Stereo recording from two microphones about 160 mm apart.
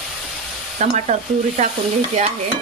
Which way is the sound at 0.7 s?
45° right (ahead or behind).